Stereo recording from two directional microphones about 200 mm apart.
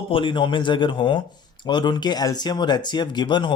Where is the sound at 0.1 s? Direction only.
25° left (ahead or behind).